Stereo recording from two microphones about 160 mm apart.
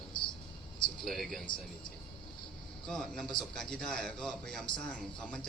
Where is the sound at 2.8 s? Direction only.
5° left (ahead or behind).